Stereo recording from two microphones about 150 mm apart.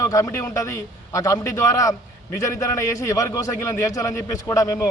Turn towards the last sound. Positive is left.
turn(degrees=20)  # may be behind; listen again after turning